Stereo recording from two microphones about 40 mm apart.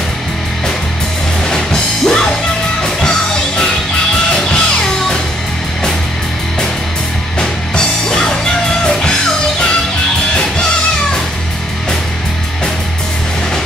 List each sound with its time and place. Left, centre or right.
1.5 s music: centre
7.3 s music: left